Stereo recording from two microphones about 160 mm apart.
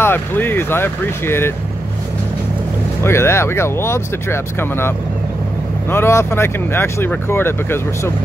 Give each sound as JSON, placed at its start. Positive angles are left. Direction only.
{"t": 0.0, "sound": "speech", "side_deg": 15}
{"t": 3.0, "sound": "speech", "side_deg": 15}